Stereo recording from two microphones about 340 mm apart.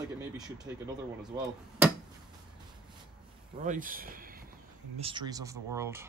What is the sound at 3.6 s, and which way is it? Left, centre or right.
Speech, right.